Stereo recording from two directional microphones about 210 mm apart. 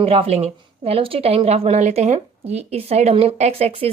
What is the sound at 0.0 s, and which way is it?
A woman's voice, 30° right (ahead or behind).